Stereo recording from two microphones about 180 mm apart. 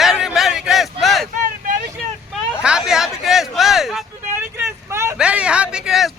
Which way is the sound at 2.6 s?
5° right (ahead or behind).